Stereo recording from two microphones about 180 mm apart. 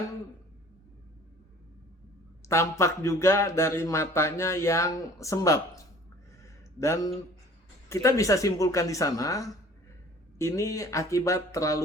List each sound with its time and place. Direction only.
2.5 s speech: 15° left (ahead or behind)
6.4 s a sound: 15° left (ahead or behind)
7.9 s speech: 15° left (ahead or behind)